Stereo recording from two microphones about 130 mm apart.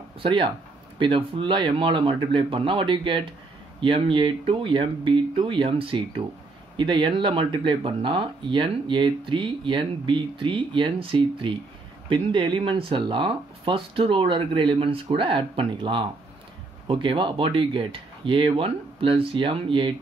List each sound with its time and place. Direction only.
0.2 s speech: 40° right (ahead or behind)